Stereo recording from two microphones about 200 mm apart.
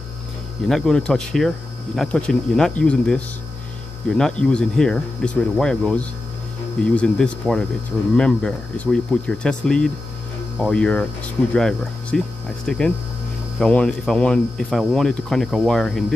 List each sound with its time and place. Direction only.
0.7 s speech: centre (ahead or behind)